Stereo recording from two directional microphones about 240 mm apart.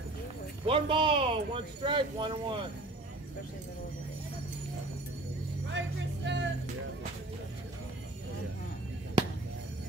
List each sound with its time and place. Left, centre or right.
0.7 s speech: right
5.7 s music: right